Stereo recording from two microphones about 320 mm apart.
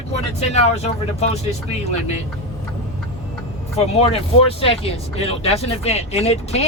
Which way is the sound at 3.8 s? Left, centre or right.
Centre.